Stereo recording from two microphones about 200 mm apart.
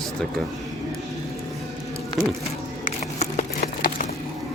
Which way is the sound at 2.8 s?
40° left (ahead or behind).